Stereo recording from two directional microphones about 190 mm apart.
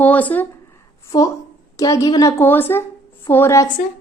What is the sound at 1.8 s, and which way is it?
A woman's voice, 15° left (ahead or behind).